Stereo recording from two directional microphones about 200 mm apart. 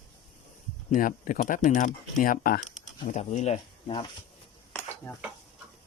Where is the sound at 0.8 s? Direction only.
40° left (ahead or behind).